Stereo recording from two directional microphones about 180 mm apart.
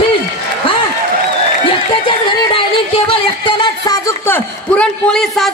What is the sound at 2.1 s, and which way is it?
A man's voice, 30° left (ahead or behind).